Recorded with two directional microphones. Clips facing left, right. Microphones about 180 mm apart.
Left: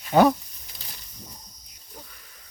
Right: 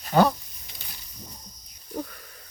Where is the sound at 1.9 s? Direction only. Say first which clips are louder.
Right 14 dB; 50° right (ahead or behind).